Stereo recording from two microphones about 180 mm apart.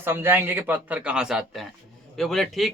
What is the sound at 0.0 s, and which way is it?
A man's voice, 10° right (ahead or behind).